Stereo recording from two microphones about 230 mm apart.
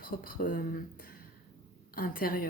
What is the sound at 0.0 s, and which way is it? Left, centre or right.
Speech, left.